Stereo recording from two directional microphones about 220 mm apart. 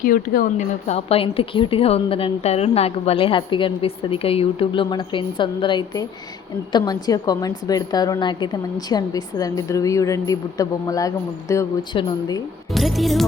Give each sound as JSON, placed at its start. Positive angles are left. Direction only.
{"t": 0.0, "sound": "a woman's voice", "side_deg": 40}
{"t": 12.7, "sound": "music", "side_deg": 0}